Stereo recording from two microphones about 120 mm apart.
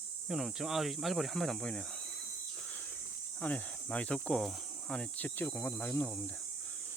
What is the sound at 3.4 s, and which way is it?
Speech, 15° left (ahead or behind).